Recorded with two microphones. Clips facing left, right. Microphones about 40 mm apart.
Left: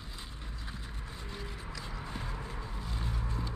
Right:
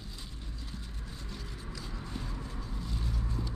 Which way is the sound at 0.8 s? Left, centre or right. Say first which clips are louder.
Left 1 dB; left.